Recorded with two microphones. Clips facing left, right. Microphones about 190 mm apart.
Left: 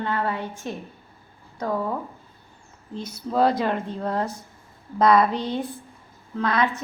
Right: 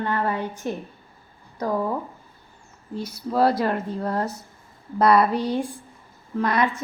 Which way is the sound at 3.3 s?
5° right (ahead or behind).